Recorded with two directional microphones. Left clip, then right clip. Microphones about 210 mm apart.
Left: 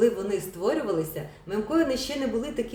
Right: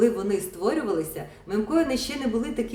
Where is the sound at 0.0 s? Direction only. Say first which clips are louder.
Right 1 dB; 15° right (ahead or behind).